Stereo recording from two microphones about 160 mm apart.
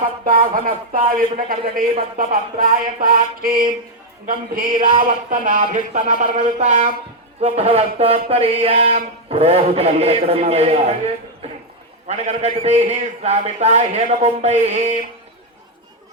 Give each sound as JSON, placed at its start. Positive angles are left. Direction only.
{"t": 0.3, "sound": "a man's voice", "side_deg": -65}
{"t": 11.4, "sound": "a sound", "side_deg": -40}
{"t": 12.0, "sound": "a man's voice", "side_deg": -40}